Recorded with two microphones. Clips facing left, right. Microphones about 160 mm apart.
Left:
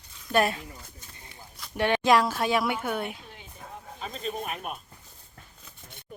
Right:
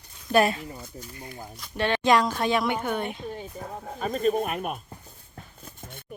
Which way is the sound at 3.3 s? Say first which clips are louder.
Right 9 dB; 40° right (ahead or behind).